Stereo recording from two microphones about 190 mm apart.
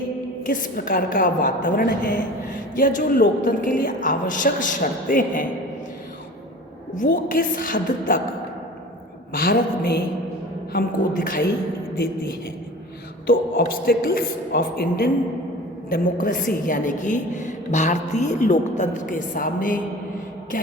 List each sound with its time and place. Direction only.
0.4 s a woman's voice: 45° left (ahead or behind)
6.9 s a woman's voice: 45° left (ahead or behind)
9.3 s a woman's voice: 50° left (ahead or behind)